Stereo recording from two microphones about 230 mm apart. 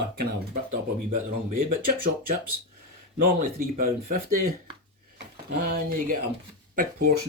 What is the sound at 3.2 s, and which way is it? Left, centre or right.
Speech, right.